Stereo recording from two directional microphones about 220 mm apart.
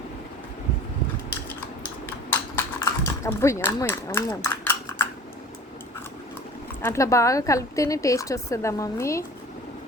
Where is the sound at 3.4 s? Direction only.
15° left (ahead or behind).